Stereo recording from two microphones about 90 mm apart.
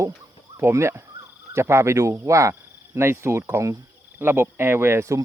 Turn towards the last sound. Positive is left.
turn(degrees=-30)  # may be behind; listen again after turning